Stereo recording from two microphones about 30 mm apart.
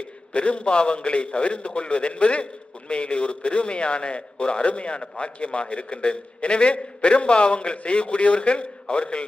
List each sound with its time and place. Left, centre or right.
0.3 s a man's voice: left